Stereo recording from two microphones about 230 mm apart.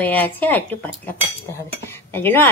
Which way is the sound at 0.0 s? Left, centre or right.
Centre.